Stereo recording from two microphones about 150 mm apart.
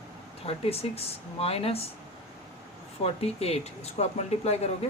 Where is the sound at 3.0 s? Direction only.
45° left (ahead or behind).